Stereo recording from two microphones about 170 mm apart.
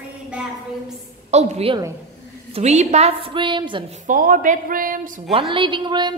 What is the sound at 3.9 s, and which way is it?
Speech, 50° right (ahead or behind).